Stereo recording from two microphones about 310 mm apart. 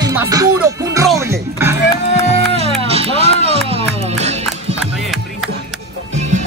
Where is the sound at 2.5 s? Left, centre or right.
Centre.